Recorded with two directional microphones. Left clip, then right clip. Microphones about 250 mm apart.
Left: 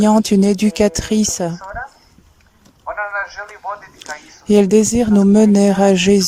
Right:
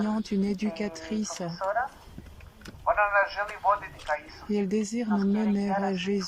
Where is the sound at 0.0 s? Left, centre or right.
Left.